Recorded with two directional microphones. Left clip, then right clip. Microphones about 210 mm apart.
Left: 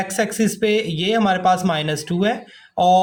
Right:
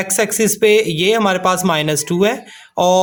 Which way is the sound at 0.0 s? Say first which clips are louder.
Right 4 dB; 30° right (ahead or behind).